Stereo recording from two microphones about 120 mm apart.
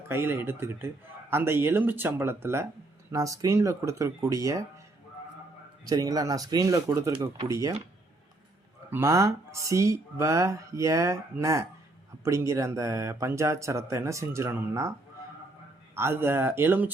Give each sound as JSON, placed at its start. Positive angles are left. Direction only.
{"t": 0.1, "sound": "speech", "side_deg": -20}
{"t": 5.8, "sound": "speech", "side_deg": -30}
{"t": 8.9, "sound": "speech", "side_deg": -20}
{"t": 16.0, "sound": "speech", "side_deg": -20}